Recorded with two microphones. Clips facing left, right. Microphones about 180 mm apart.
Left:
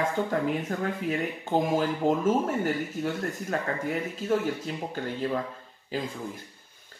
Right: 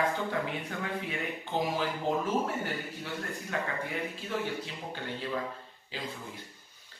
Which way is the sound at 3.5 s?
45° left (ahead or behind).